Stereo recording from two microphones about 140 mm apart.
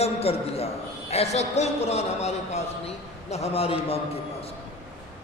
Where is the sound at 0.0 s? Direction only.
45° left (ahead or behind).